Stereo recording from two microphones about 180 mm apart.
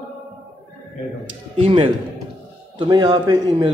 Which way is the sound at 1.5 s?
30° right (ahead or behind).